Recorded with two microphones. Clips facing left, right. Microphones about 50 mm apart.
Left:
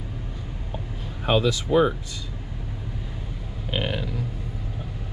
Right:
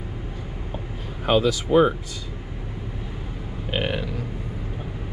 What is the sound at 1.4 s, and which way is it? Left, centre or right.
Speech, right.